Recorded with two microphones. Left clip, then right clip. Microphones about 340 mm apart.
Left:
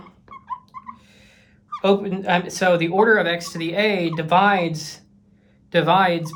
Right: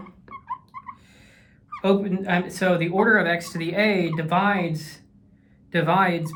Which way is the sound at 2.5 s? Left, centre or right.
Centre.